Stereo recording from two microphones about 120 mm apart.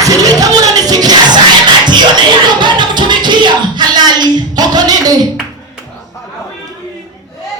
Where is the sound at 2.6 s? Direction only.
40° right (ahead or behind).